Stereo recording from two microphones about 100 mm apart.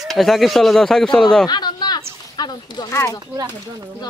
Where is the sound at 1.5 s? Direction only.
45° left (ahead or behind).